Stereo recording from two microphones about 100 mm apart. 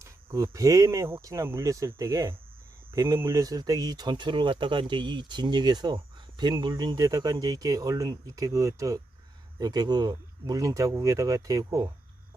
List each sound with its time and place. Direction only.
0.0 s speech: 30° right (ahead or behind)